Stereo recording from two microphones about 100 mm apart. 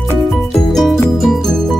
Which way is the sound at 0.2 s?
Centre (ahead or behind).